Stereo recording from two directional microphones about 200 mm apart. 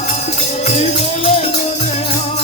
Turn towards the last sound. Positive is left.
turn(degrees=30)  # may be behind; listen again after turning